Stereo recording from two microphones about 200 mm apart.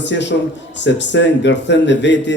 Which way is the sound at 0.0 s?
60° left (ahead or behind).